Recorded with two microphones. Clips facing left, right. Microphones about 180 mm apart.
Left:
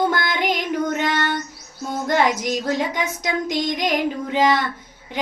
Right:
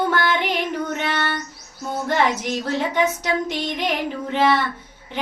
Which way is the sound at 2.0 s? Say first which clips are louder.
Left 2 dB; 10° left (ahead or behind).